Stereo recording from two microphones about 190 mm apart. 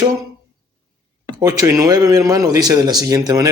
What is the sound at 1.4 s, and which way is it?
Speech, 15° right (ahead or behind).